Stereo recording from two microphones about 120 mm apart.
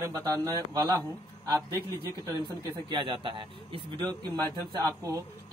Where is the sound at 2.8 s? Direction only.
45° right (ahead or behind).